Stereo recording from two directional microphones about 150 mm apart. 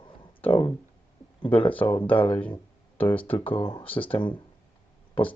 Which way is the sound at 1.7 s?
10° left (ahead or behind).